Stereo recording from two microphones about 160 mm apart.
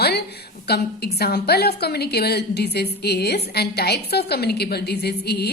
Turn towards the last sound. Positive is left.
turn(degrees=90)